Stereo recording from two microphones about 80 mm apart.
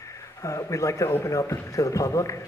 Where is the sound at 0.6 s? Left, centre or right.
Left.